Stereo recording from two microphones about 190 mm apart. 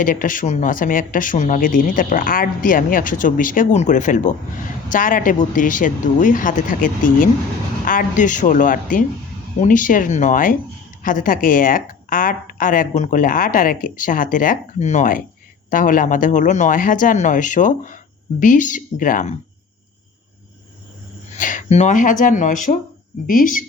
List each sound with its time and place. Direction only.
0.0 s speech: 45° left (ahead or behind)
21.3 s speech: 45° left (ahead or behind)